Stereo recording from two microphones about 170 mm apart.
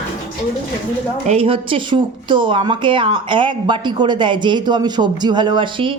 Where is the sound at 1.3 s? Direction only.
35° right (ahead or behind).